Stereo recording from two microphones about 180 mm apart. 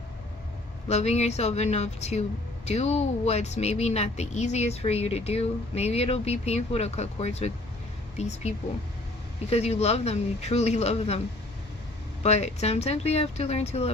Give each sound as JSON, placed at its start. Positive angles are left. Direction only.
{"t": 0.9, "sound": "speech", "side_deg": 35}
{"t": 9.5, "sound": "speech", "side_deg": 35}
{"t": 12.2, "sound": "speech", "side_deg": 35}